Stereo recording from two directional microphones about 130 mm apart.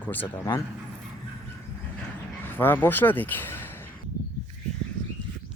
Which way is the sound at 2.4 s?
15° left (ahead or behind).